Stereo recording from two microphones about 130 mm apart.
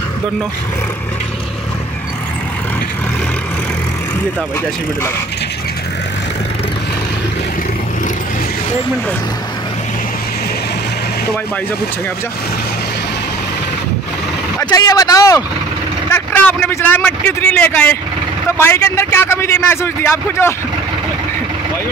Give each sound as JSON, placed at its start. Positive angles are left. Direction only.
{"t": 14.6, "sound": "a man's voice", "side_deg": 25}
{"t": 16.1, "sound": "a man's voice", "side_deg": 15}